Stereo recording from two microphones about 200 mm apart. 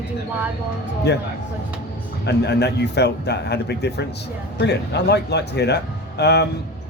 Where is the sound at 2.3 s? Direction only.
55° left (ahead or behind).